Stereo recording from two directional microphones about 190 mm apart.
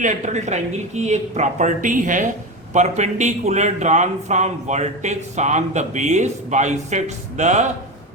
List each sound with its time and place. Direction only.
0.0 s a man's voice: 40° right (ahead or behind)